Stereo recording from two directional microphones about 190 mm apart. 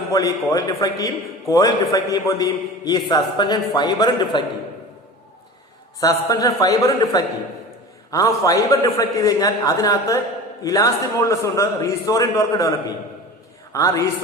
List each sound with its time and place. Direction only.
0.1 s a man's voice: 20° left (ahead or behind)
6.0 s a man's voice: 20° left (ahead or behind)
13.7 s a man's voice: 15° left (ahead or behind)